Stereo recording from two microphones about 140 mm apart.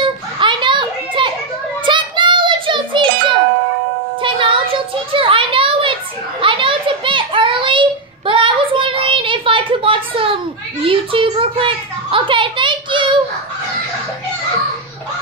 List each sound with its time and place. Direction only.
0.0 s children playing: 35° right (ahead or behind)
1.9 s music: 35° right (ahead or behind)
4.2 s a sound: 35° right (ahead or behind)